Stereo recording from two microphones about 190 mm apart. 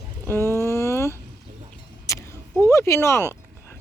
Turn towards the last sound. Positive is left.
turn(degrees=15)  # may be behind; listen again after turning